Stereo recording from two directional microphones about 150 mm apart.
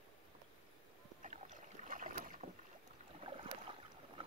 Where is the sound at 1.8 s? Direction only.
65° right (ahead or behind).